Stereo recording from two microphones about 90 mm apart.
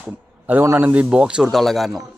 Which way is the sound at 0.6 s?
25° right (ahead or behind).